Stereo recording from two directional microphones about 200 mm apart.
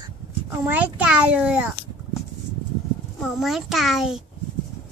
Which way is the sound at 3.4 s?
Centre (ahead or behind).